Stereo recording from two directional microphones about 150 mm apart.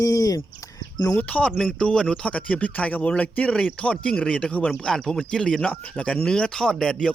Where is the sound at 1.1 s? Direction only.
10° left (ahead or behind).